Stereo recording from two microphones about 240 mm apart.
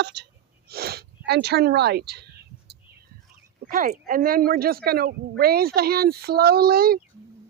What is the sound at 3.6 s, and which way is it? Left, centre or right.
Speech, right.